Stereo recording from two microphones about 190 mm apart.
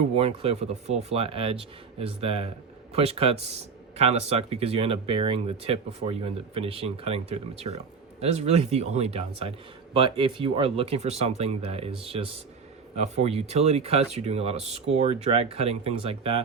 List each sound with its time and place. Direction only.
0.1 s speech: 30° right (ahead or behind)